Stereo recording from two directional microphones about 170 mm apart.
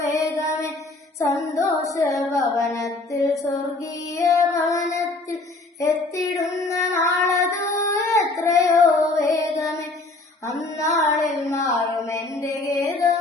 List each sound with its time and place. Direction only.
0.0 s music: 20° left (ahead or behind)
0.3 s mantra: 20° left (ahead or behind)
1.3 s music: 20° left (ahead or behind)
5.8 s child singing: 20° left (ahead or behind)
10.4 s female singing: 15° left (ahead or behind)
10.8 s child singing: 40° left (ahead or behind)
11.1 s child singing: 20° left (ahead or behind)
11.5 s music: 15° left (ahead or behind)